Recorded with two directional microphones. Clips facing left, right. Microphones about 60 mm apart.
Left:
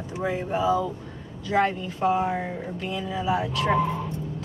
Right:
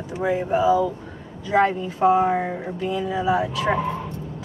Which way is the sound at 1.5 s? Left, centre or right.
Right.